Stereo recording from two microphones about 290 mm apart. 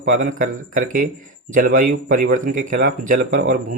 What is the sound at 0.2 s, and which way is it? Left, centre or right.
Speech, right.